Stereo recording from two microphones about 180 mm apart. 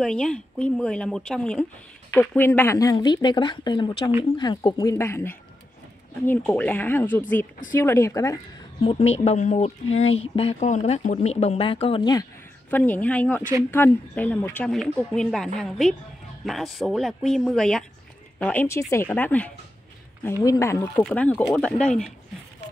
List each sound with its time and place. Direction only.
0.0 s a woman's voice: 5° left (ahead or behind)
8.8 s speech: 35° left (ahead or behind)
12.7 s speech: 10° left (ahead or behind)